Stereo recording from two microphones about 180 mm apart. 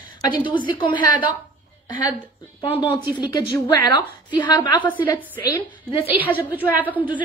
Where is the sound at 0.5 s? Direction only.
25° left (ahead or behind).